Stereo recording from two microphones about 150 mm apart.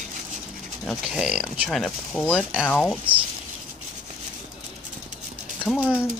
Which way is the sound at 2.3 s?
5° right (ahead or behind).